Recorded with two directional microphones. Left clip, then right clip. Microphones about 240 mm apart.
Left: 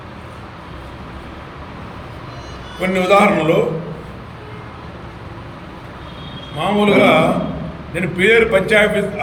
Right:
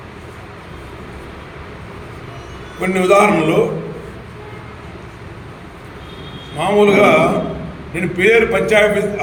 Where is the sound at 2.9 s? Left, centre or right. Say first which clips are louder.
Right 1 dB; centre.